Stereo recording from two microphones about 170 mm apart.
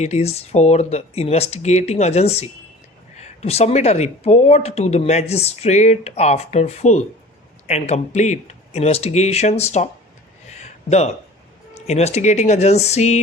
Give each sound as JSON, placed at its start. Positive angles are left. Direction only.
{"t": 0.0, "sound": "speech", "side_deg": 40}
{"t": 10.6, "sound": "a sound", "side_deg": 40}
{"t": 11.7, "sound": "speech", "side_deg": 40}